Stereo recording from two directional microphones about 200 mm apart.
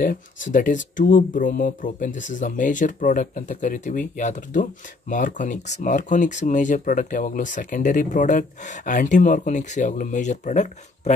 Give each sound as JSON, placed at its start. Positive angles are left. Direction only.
{"t": 0.0, "sound": "speech", "side_deg": 40}